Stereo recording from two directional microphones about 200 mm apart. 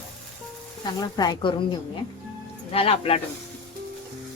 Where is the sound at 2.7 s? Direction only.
30° left (ahead or behind).